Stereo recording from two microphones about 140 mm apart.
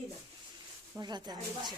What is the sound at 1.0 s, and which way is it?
Speech, 30° right (ahead or behind).